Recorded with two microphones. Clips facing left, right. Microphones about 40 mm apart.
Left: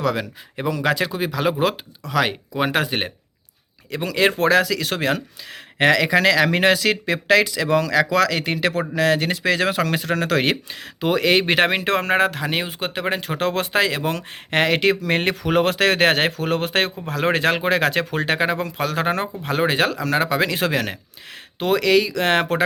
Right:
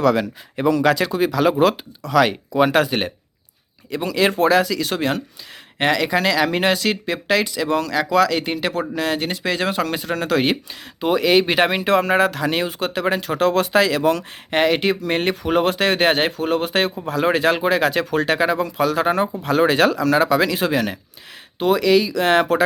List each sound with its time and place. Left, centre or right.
0.0 s speech: centre
3.9 s speech: left
5.8 s speech: left
12.3 s speech: left
14.5 s speech: left
18.1 s speech: left
19.4 s speech: left
20.5 s speech: left